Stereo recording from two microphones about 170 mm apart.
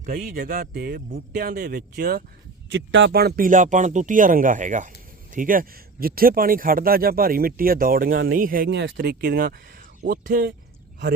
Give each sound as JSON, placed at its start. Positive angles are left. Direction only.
{"t": 0.0, "sound": "a man's voice", "side_deg": -50}
{"t": 2.7, "sound": "a man's voice", "side_deg": -90}